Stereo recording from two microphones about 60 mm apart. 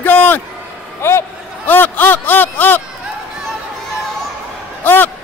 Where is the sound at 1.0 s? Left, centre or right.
Left.